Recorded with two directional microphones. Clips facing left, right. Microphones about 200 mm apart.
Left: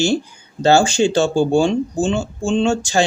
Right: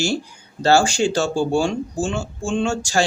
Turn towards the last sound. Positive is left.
turn(degrees=20)  # may be behind; listen again after turning